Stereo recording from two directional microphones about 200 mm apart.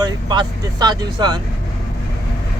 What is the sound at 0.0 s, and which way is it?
Speech, 20° right (ahead or behind).